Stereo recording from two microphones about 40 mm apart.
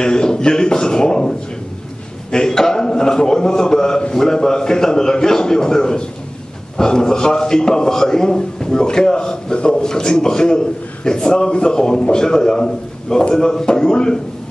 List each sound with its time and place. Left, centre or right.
0.0 s a man's voice: centre
2.3 s a man's voice: centre